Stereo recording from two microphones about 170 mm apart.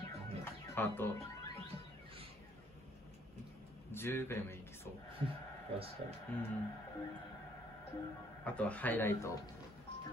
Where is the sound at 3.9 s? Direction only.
15° left (ahead or behind).